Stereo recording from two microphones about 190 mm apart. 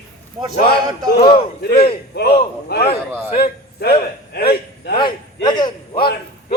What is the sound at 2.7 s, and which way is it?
A man's voice, 60° left (ahead or behind).